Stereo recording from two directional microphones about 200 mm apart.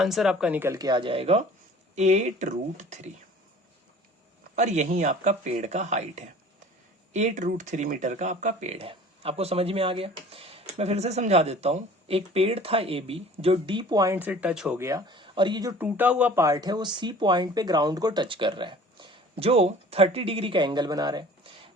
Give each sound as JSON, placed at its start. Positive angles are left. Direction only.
{"t": 0.0, "sound": "speech", "side_deg": 0}
{"t": 4.5, "sound": "speech", "side_deg": -35}
{"t": 14.8, "sound": "speech", "side_deg": -15}
{"t": 15.8, "sound": "speech", "side_deg": -10}